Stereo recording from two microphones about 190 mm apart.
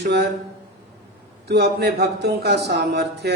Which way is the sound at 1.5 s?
60° right (ahead or behind).